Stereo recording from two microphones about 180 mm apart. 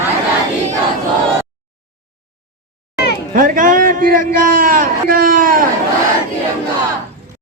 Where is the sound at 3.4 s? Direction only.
50° right (ahead or behind).